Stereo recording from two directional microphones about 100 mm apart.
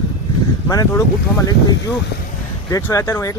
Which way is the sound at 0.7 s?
40° left (ahead or behind).